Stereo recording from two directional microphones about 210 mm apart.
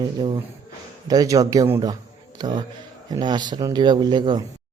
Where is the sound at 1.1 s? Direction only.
15° right (ahead or behind).